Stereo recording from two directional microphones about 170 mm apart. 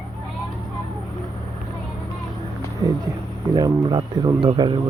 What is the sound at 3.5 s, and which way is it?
Speech, 20° right (ahead or behind).